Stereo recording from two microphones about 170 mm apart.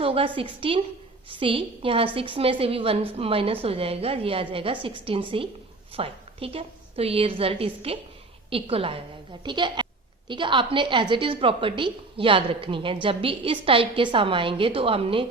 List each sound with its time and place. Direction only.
0.0 s a woman's voice: 30° right (ahead or behind)